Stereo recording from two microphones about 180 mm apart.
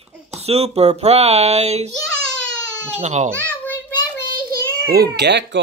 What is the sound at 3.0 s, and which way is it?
Speech, 40° right (ahead or behind).